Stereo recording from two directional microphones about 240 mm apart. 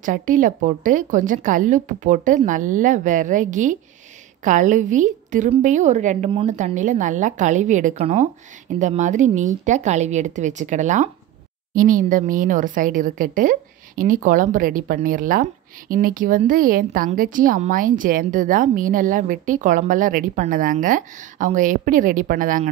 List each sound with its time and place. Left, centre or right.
0.0 s speech: right